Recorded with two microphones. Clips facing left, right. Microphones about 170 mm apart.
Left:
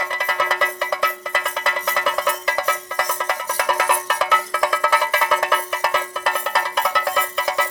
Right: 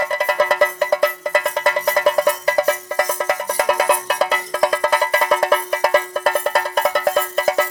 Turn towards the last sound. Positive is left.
turn(degrees=-45)  # may be behind; listen again after turning